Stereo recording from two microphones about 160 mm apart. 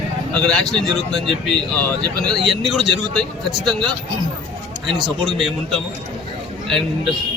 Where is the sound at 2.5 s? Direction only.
Centre (ahead or behind).